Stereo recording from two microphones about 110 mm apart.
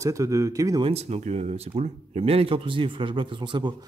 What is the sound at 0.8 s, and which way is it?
Speech, 70° right (ahead or behind).